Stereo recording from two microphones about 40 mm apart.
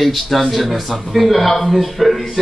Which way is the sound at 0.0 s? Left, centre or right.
Centre.